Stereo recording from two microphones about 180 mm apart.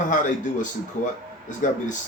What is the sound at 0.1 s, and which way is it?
Speech, 45° left (ahead or behind).